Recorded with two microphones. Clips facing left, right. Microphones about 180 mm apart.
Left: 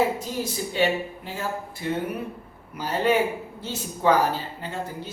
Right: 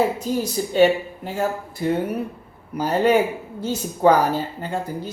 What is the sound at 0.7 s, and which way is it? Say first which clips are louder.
A woman's voice: right 8 dB; 45° right (ahead or behind).